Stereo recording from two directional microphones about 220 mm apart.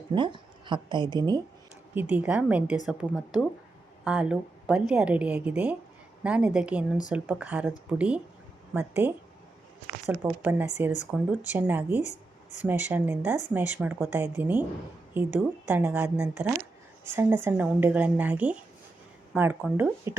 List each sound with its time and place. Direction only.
0.1 s speech: 20° right (ahead or behind)
2.0 s a woman's voice: 5° right (ahead or behind)